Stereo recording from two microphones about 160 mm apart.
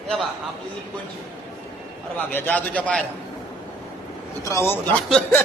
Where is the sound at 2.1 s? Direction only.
10° left (ahead or behind).